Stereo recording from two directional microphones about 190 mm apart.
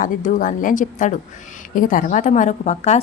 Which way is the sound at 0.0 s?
45° left (ahead or behind).